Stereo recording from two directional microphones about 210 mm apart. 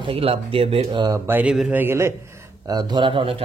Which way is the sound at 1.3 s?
5° right (ahead or behind).